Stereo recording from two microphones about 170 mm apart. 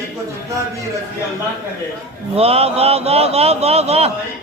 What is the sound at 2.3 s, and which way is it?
A man's voice, 35° right (ahead or behind).